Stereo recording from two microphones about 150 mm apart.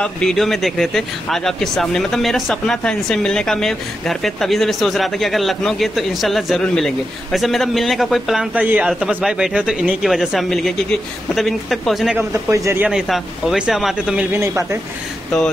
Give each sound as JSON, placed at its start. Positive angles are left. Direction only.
{"t": 0.0, "sound": "speech", "side_deg": 5}
{"t": 12.4, "sound": "speech", "side_deg": -20}
{"t": 12.8, "sound": "speech", "side_deg": 0}
{"t": 14.4, "sound": "speech", "side_deg": -15}